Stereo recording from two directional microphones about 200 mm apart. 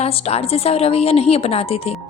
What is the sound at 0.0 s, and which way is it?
A woman's voice, 30° left (ahead or behind).